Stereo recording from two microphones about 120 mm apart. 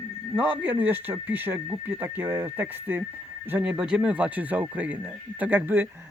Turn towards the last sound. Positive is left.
turn(degrees=-15)  # may be behind; listen again after turning